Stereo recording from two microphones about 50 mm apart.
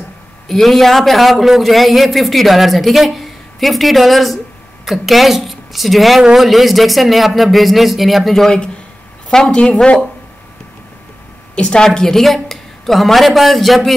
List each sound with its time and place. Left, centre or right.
0.5 s a man's voice: centre
9.3 s speech: centre
11.5 s a man's voice: centre